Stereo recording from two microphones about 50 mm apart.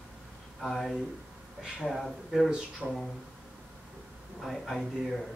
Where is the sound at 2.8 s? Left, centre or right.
Right.